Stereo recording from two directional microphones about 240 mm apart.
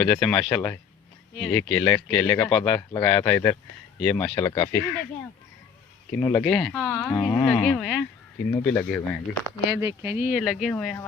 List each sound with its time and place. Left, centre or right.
0.0 s speech: centre
6.1 s speech: centre
9.6 s speech: centre